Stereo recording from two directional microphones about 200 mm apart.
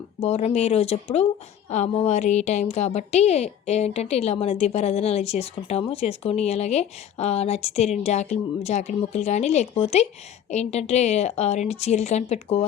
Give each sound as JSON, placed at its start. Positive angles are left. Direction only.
{"t": 0.2, "sound": "a woman's voice", "side_deg": 30}